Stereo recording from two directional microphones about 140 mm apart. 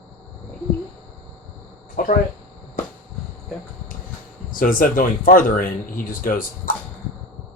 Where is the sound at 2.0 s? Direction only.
90° left.